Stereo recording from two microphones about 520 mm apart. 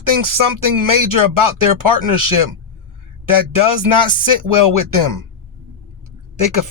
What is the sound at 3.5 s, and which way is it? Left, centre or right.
Speech, right.